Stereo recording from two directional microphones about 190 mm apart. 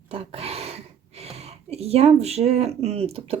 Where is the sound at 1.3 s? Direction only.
35° right (ahead or behind).